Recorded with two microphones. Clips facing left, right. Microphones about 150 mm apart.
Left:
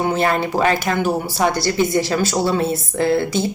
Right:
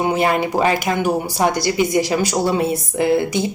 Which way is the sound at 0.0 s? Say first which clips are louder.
Right 1 dB; 15° right (ahead or behind).